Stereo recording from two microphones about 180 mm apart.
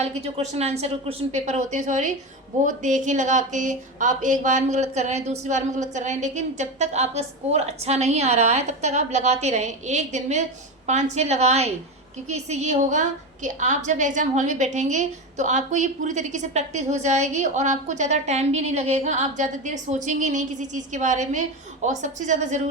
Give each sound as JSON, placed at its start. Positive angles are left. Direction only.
{"t": 0.0, "sound": "a woman's voice", "side_deg": -35}